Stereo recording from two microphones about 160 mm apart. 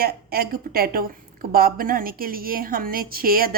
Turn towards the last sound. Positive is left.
turn(degrees=-65)  # may be behind; listen again after turning